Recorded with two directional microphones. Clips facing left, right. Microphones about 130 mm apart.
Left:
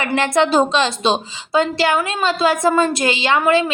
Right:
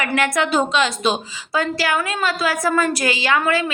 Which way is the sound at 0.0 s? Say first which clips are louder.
Left 3 dB; 25° left (ahead or behind).